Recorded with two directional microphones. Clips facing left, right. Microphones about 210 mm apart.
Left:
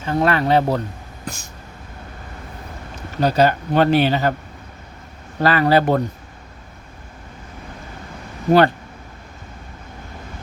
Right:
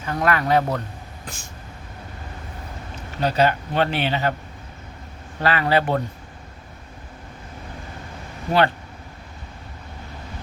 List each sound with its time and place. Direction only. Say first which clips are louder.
0.0 s speech: left 4 dB; 30° left (ahead or behind)
1.2 s vehicle: left 8 dB; 40° left (ahead or behind)
3.2 s speech: left 3 dB; 40° left (ahead or behind)
5.4 s speech: left 5 dB; 40° left (ahead or behind)